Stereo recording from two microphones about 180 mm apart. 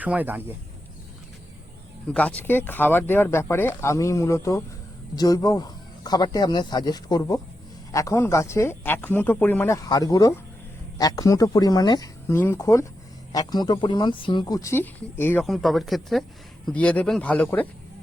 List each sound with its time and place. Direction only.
0.0 s speech: 10° right (ahead or behind)
2.1 s speech: 10° left (ahead or behind)